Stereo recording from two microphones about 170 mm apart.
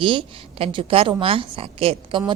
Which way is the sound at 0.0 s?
30° right (ahead or behind).